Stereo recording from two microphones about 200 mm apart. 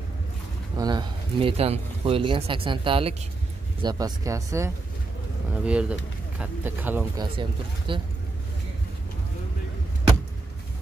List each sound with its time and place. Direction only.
0.7 s speech: 20° right (ahead or behind)
7.2 s speech: 25° right (ahead or behind)